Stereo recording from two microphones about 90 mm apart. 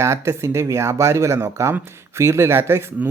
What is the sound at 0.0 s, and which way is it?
Speech, 30° right (ahead or behind).